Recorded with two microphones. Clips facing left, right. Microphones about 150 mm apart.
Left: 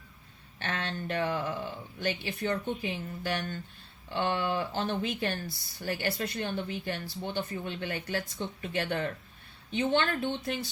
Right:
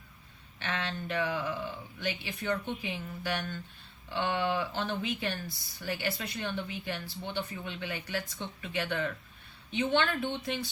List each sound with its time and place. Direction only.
0.6 s speech: 45° left (ahead or behind)